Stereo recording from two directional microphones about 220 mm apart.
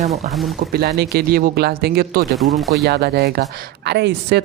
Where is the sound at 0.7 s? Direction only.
45° right (ahead or behind).